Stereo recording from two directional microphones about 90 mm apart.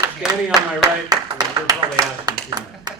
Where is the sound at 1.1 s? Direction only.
45° right (ahead or behind).